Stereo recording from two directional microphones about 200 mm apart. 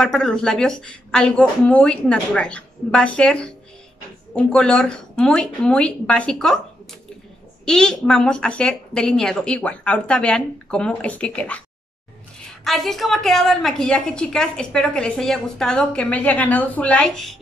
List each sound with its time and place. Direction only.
0.0 s a woman's voice: 5° left (ahead or behind)